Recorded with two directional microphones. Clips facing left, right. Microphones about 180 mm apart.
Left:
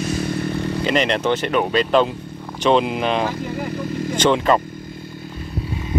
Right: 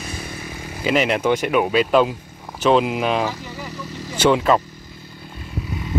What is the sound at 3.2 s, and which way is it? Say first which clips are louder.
Vehicle: left 4 dB; 55° left (ahead or behind).